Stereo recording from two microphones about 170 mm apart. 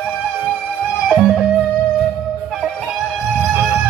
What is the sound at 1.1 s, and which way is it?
Music, centre (ahead or behind).